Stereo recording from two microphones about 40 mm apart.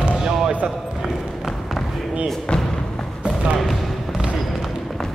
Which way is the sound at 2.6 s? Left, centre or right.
Centre.